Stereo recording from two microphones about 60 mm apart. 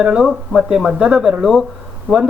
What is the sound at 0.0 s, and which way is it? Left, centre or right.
Speech, centre.